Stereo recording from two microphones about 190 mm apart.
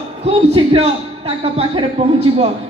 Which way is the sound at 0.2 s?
30° right (ahead or behind).